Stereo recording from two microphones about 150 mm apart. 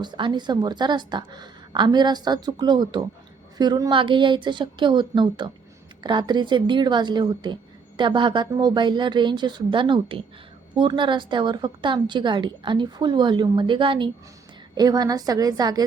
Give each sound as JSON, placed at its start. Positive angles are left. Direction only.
{"t": 0.0, "sound": "a woman's voice", "side_deg": -30}